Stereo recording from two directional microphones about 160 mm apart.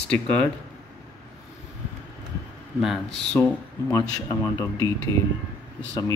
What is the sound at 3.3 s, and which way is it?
Speech, 15° left (ahead or behind).